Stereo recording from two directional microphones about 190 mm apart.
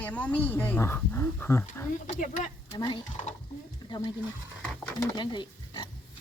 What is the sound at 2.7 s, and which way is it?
Chicken, 25° left (ahead or behind).